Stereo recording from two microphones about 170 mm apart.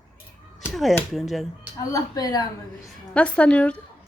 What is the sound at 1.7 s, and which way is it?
Speech, 20° left (ahead or behind).